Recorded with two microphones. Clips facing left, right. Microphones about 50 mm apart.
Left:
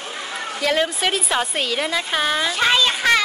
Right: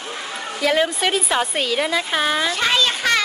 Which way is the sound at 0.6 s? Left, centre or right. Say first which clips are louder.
Right 2 dB; centre.